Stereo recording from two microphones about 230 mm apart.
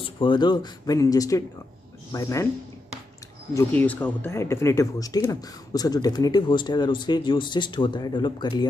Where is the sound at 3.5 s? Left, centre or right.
Centre.